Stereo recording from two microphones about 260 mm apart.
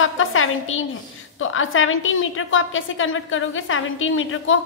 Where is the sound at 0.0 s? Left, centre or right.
Left.